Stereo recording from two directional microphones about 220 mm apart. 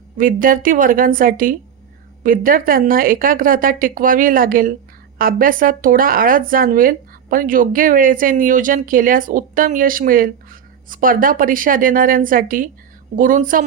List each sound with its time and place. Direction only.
0.2 s speech: 40° right (ahead or behind)